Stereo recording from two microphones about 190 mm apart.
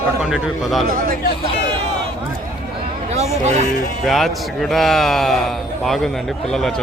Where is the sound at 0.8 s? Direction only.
50° right (ahead or behind).